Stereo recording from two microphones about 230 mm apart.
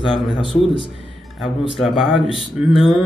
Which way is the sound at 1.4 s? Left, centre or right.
Centre.